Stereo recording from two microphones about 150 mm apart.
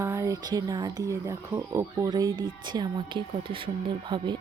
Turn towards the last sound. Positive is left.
turn(degrees=-35)  # may be behind; listen again after turning